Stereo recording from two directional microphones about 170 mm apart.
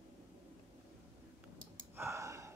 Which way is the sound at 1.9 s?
15° right (ahead or behind).